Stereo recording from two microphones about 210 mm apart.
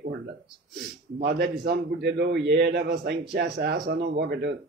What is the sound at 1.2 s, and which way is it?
A man's voice, 50° right (ahead or behind).